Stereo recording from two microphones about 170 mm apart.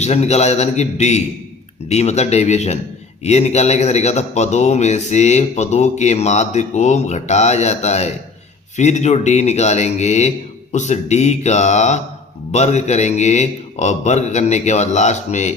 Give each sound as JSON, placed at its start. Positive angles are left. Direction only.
{"t": 0.0, "sound": "a man's voice", "side_deg": 40}